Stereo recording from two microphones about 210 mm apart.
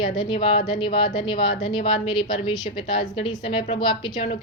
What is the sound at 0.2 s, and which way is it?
Speech, 25° left (ahead or behind).